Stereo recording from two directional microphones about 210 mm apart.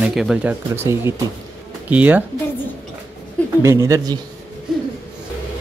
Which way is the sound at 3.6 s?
15° right (ahead or behind).